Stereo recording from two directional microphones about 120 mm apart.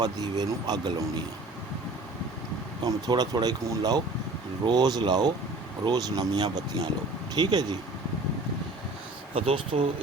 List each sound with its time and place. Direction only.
0.0 s speech: 35° right (ahead or behind)
2.8 s speech: 35° right (ahead or behind)
9.3 s speech: 55° right (ahead or behind)